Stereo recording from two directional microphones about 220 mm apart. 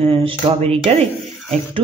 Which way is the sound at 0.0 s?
25° right (ahead or behind).